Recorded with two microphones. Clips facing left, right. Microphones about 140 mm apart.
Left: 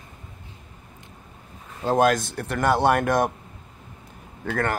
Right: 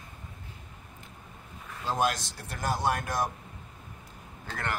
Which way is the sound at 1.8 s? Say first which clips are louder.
Left 9 dB; 55° left (ahead or behind).